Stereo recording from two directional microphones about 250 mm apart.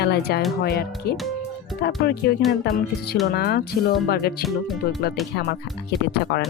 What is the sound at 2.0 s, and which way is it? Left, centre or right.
Speech, left.